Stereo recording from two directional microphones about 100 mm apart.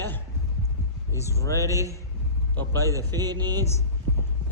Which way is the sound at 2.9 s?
40° right (ahead or behind).